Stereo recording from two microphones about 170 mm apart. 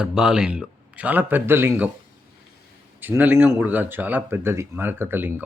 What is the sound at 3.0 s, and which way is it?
Speech, 10° right (ahead or behind).